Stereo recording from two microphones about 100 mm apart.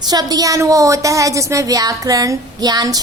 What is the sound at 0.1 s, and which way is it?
Speech, 40° right (ahead or behind).